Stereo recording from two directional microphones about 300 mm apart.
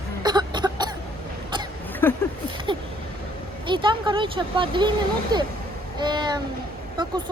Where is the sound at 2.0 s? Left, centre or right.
Centre.